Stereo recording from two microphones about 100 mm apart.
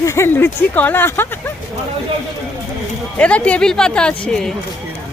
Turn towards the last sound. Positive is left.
turn(degrees=5)  # may be behind; listen again after turning